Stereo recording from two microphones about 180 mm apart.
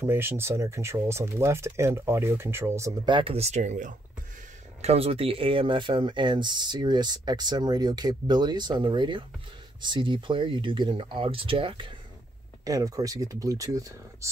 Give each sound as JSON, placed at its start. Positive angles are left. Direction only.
{"t": 0.0, "sound": "speech", "side_deg": -15}
{"t": 3.1, "sound": "speech", "side_deg": -30}